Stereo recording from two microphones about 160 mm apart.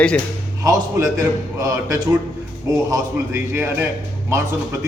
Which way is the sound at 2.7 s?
15° right (ahead or behind).